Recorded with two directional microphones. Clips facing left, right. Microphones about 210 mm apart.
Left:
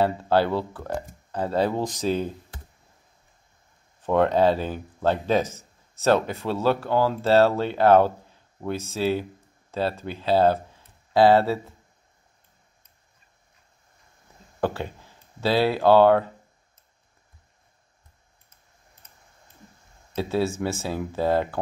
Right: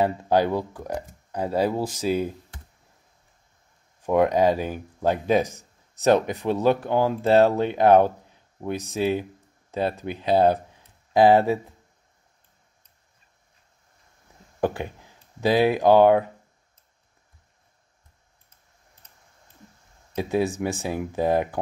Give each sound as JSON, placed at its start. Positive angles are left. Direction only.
{"t": 0.0, "sound": "speech", "side_deg": -15}
{"t": 4.0, "sound": "speech", "side_deg": -10}
{"t": 14.6, "sound": "speech", "side_deg": -15}
{"t": 20.2, "sound": "speech", "side_deg": -15}